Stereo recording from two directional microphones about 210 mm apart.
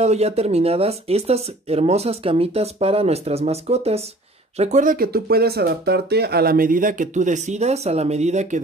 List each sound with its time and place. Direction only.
0.0 s speech: 30° right (ahead or behind)